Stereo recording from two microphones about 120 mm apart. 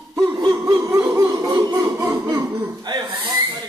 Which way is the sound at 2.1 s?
25° right (ahead or behind).